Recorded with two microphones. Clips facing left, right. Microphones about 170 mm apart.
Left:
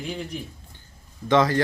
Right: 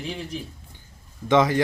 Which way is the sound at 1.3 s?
20° right (ahead or behind).